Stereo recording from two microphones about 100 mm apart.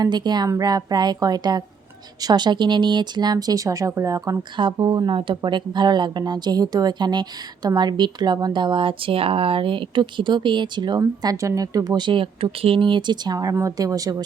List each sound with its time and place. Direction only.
0.0 s a woman's voice: 45° right (ahead or behind)
4.5 s a woman's voice: 50° right (ahead or behind)
11.0 s speech: 35° right (ahead or behind)